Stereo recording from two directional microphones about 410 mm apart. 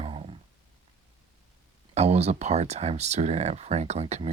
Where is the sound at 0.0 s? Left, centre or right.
Centre.